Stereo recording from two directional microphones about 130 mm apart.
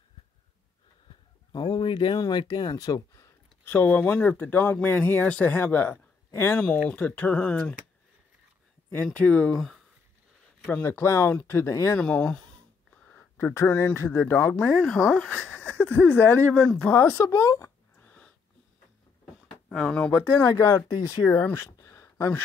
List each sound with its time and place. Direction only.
1.5 s speech: 35° left (ahead or behind)
3.6 s speech: 15° left (ahead or behind)
9.0 s speech: 10° left (ahead or behind)
10.7 s speech: 15° left (ahead or behind)
12.0 s speech: 10° left (ahead or behind)
16.5 s speech: 5° left (ahead or behind)
16.9 s a sound: 20° left (ahead or behind)
19.4 s drawer open or close: 5° left (ahead or behind)
20.3 s speech: 25° left (ahead or behind)